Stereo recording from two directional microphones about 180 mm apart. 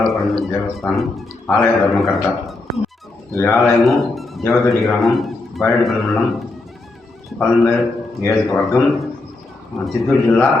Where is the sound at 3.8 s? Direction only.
Centre (ahead or behind).